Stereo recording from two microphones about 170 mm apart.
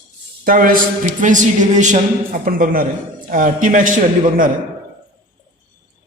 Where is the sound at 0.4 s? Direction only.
55° right (ahead or behind).